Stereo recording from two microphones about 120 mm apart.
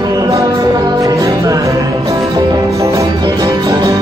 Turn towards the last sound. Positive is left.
turn(degrees=-35)  # may be behind; listen again after turning